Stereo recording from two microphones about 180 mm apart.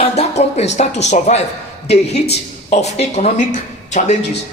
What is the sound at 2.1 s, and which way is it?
Speech, 65° left (ahead or behind).